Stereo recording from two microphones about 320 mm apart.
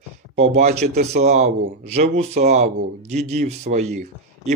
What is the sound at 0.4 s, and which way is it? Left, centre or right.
A man's voice, right.